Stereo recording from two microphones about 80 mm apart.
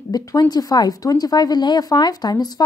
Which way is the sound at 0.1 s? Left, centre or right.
Left.